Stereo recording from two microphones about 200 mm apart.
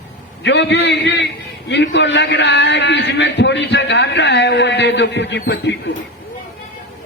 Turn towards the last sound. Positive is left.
turn(degrees=60)  # may be behind; listen again after turning